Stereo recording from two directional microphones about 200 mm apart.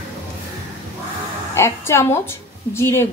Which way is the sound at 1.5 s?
15° left (ahead or behind).